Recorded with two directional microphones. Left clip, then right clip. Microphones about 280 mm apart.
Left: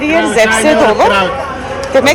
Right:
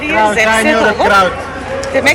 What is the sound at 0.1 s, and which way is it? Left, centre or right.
Speech, centre.